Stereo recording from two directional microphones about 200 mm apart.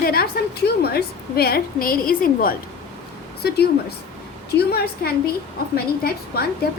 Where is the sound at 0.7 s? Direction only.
50° left (ahead or behind).